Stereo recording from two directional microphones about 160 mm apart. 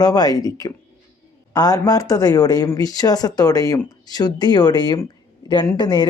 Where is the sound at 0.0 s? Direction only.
25° left (ahead or behind).